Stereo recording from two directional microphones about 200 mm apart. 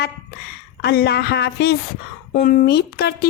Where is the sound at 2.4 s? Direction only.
45° left (ahead or behind).